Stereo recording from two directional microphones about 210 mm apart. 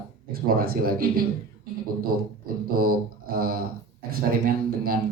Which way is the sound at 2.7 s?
45° right (ahead or behind).